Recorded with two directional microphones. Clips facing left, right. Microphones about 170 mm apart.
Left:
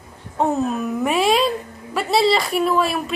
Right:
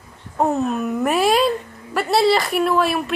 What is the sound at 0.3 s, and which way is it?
A woman's voice, centre (ahead or behind).